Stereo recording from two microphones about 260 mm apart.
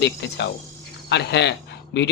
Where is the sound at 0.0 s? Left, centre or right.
Left.